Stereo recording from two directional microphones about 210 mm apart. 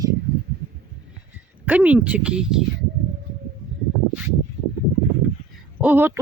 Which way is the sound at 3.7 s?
Centre (ahead or behind).